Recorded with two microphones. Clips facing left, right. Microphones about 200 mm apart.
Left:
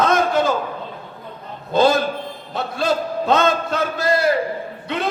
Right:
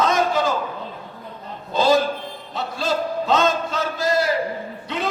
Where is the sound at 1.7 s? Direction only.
60° left (ahead or behind).